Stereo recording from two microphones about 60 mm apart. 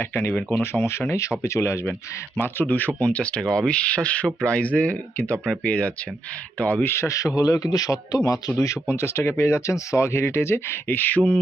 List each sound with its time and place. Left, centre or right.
0.0 s speech: left
2.4 s speech: left
6.8 s speech: left
7.3 s speech: left
10.9 s speech: left